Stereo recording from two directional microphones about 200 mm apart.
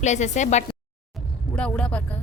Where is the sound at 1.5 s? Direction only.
5° left (ahead or behind).